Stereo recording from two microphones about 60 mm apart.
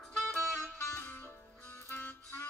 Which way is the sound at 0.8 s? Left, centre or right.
Left.